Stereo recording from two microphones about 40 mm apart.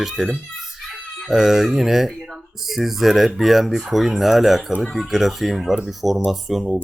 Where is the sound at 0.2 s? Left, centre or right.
Centre.